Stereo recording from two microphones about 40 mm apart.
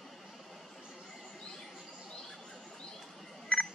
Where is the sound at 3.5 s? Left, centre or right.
Left.